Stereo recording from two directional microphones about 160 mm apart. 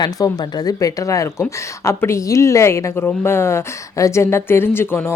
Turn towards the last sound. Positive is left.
turn(degrees=15)  # may be behind; listen again after turning